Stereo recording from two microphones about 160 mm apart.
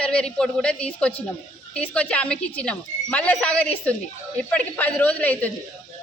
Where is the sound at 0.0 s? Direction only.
5° left (ahead or behind).